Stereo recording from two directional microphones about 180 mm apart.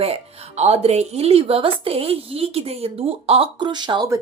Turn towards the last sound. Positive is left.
turn(degrees=-25)  # may be behind; listen again after turning